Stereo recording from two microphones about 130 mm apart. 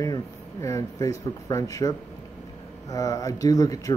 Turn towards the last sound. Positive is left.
turn(degrees=30)  # may be behind; listen again after turning